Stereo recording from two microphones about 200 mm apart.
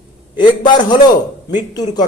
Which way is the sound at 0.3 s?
20° left (ahead or behind).